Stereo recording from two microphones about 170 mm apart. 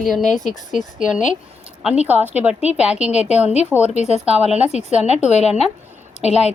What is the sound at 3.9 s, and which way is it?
A woman's voice, 40° left (ahead or behind).